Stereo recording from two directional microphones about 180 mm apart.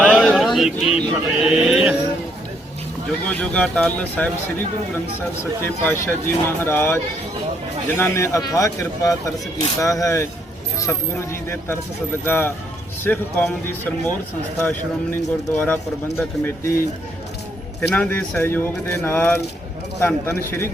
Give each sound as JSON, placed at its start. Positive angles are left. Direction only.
{"t": 0.0, "sound": "a sound", "side_deg": 5}
{"t": 3.2, "sound": "speech", "side_deg": 5}
{"t": 5.6, "sound": "speech", "side_deg": 10}
{"t": 17.8, "sound": "speech", "side_deg": 5}